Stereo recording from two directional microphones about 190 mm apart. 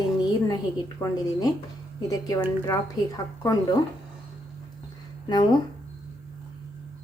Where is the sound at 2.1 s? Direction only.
20° left (ahead or behind).